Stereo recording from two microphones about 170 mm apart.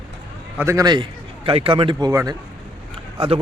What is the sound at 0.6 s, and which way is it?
A man's voice, 15° right (ahead or behind).